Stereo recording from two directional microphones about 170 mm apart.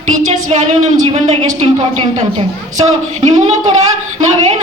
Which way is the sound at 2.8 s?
40° right (ahead or behind).